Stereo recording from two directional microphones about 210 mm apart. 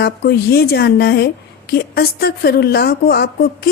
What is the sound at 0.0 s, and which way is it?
A woman's voice, 50° left (ahead or behind).